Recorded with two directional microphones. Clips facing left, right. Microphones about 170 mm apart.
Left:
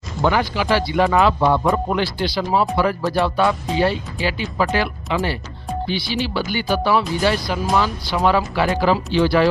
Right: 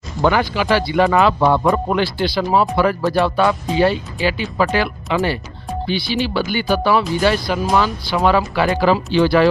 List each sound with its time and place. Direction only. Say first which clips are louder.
0.3 s speech: right 2 dB; 70° right (ahead or behind)
1.4 s speech: right 2 dB; 60° right (ahead or behind)